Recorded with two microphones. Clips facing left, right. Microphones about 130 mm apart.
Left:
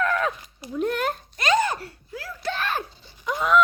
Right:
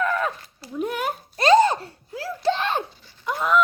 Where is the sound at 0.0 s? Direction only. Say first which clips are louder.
Even; 5° right (ahead or behind).